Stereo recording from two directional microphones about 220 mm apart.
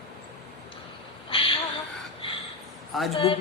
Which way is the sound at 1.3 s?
25° left (ahead or behind).